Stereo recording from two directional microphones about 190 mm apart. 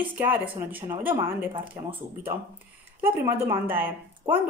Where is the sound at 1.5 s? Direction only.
25° right (ahead or behind).